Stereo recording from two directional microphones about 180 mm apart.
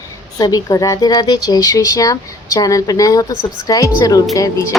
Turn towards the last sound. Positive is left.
turn(degrees=20)  # may be behind; listen again after turning